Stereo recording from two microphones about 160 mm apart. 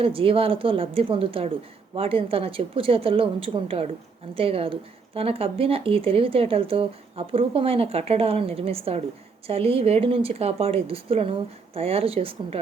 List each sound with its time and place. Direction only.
0.0 s speech: 35° right (ahead or behind)